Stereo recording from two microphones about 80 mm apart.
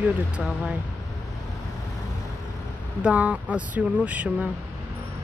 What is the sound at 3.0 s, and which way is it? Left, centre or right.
Speech, centre.